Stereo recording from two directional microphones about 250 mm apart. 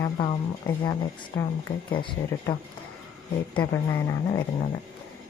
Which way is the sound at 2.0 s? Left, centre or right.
Centre.